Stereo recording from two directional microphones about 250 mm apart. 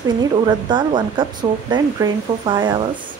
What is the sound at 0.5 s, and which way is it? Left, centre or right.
Speech, centre.